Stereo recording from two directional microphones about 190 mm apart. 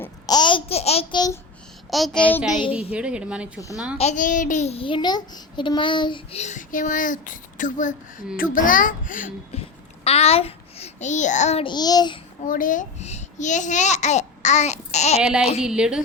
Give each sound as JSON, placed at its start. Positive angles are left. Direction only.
{"t": 0.0, "sound": "babbling", "side_deg": 20}
{"t": 1.9, "sound": "speech", "side_deg": 0}
{"t": 3.9, "sound": "a child's voice", "side_deg": 35}
{"t": 9.6, "sound": "a child's voice", "side_deg": 30}
{"t": 12.5, "sound": "a child's voice", "side_deg": 45}
{"t": 15.2, "sound": "speech", "side_deg": -5}